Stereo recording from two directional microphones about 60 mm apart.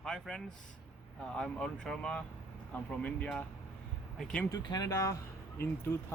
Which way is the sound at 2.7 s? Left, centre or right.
Left.